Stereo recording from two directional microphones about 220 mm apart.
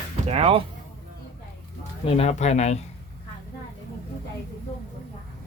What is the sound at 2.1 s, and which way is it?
Speech, 30° left (ahead or behind).